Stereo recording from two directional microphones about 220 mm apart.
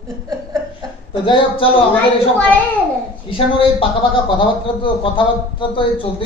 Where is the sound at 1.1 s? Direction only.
20° left (ahead or behind).